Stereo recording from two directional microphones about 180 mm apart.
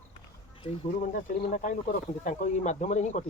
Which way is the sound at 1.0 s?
45° left (ahead or behind).